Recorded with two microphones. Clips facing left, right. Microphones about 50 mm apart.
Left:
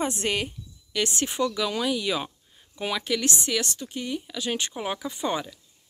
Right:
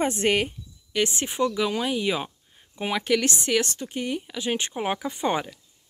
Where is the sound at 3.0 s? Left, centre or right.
Right.